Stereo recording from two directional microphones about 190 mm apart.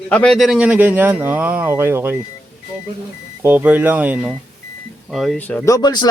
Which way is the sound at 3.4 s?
10° right (ahead or behind).